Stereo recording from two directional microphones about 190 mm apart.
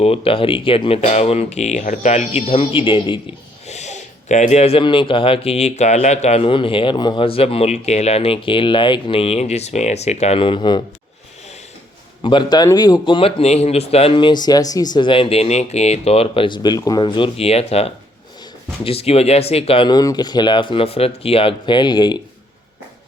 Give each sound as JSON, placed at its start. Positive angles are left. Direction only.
{"t": 0.0, "sound": "speech", "side_deg": 30}
{"t": 3.7, "sound": "speech", "side_deg": 35}
{"t": 12.2, "sound": "speech", "side_deg": 25}